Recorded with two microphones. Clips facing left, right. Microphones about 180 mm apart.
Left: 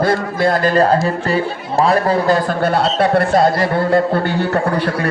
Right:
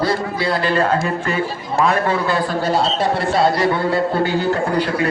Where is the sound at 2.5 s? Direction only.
60° left (ahead or behind).